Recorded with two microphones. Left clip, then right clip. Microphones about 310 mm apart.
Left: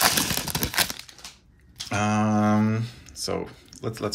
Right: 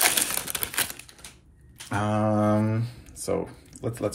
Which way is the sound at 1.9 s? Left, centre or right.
Centre.